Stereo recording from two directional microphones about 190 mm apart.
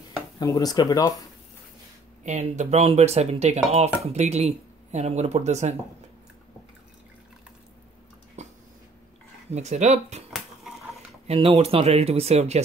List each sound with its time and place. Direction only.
0.4 s speech: 20° left (ahead or behind)
2.2 s speech: 40° right (ahead or behind)
8.4 s a sound: 35° right (ahead or behind)
9.5 s speech: 35° right (ahead or behind)
10.3 s a sound: centre (ahead or behind)
11.2 s speech: 30° right (ahead or behind)